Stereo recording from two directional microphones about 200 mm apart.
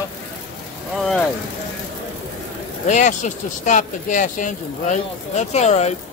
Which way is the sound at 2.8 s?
35° left (ahead or behind).